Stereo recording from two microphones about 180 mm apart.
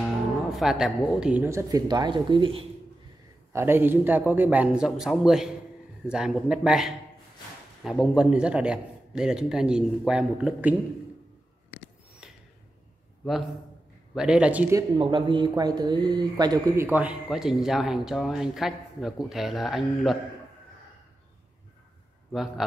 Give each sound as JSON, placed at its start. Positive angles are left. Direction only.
{"t": 0.5, "sound": "speech", "side_deg": 0}
{"t": 3.5, "sound": "speech", "side_deg": -10}
{"t": 12.2, "sound": "a sound", "side_deg": -5}
{"t": 14.1, "sound": "speech", "side_deg": -5}
{"t": 14.8, "sound": "speech", "side_deg": -25}